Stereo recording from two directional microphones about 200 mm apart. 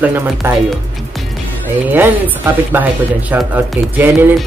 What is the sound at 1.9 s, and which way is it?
Speech, 10° right (ahead or behind).